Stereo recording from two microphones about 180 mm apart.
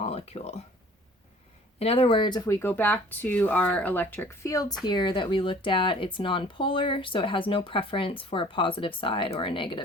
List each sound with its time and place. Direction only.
0.0 s speech: 35° left (ahead or behind)
1.8 s speech: 35° left (ahead or behind)